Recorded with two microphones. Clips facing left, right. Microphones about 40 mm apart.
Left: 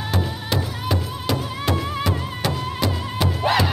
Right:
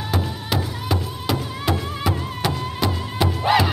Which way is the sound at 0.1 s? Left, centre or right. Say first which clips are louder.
Even; centre.